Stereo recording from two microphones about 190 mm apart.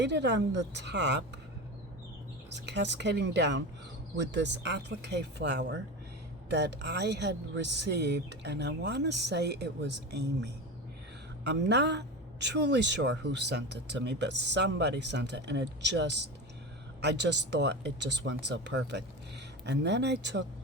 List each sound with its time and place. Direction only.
0.0 s speech: 65° right (ahead or behind)
2.5 s speech: 65° right (ahead or behind)